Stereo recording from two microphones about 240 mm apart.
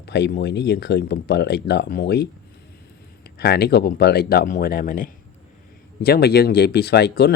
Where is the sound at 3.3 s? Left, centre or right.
Left.